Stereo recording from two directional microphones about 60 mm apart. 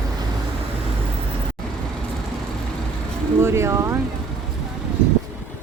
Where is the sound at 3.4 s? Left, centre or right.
Right.